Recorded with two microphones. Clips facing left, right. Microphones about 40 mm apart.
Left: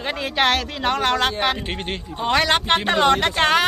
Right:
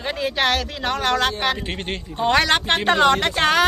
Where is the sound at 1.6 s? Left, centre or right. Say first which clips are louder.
Even; centre.